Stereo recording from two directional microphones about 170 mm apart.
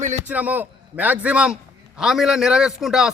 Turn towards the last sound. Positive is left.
turn(degrees=-5)  # may be behind; listen again after turning